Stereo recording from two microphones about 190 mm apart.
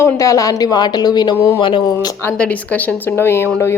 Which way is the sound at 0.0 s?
15° left (ahead or behind).